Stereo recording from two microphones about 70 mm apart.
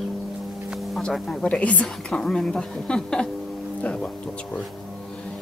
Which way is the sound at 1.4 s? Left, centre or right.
Centre.